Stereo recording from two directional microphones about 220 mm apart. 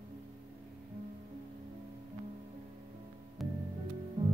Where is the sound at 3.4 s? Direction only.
Centre (ahead or behind).